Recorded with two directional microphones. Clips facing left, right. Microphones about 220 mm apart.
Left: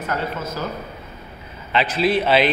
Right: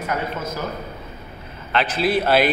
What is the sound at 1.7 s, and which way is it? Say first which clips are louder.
Speech: left 1 dB; centre (ahead or behind).